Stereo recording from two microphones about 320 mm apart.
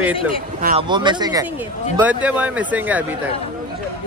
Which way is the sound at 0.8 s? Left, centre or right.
Centre.